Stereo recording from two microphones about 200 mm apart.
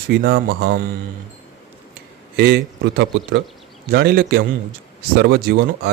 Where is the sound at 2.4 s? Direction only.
55° right (ahead or behind).